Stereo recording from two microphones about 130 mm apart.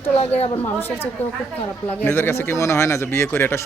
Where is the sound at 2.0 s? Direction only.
20° left (ahead or behind).